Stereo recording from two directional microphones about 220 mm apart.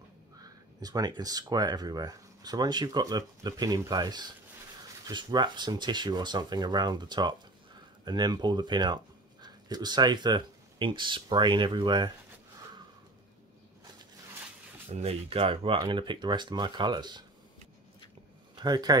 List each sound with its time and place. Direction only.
0.4 s speech: 15° right (ahead or behind)
14.9 s speech: 30° right (ahead or behind)
18.6 s speech: 20° right (ahead or behind)